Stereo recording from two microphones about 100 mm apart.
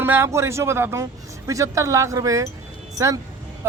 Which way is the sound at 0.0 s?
25° right (ahead or behind).